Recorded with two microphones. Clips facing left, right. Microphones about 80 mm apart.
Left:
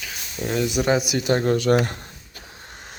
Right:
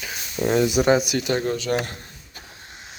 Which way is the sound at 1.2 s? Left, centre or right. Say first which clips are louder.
Left 3 dB; left.